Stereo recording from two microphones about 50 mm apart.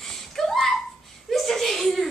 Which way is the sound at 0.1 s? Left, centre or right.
Centre.